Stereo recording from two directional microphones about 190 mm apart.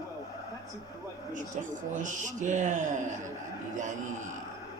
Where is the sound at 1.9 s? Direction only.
40° right (ahead or behind).